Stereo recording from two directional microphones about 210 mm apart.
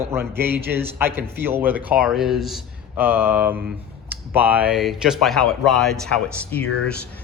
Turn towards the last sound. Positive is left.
turn(degrees=5)  # may be behind; listen again after turning